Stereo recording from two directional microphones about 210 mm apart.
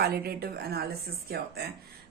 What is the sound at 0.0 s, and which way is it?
A woman's voice, 50° right (ahead or behind).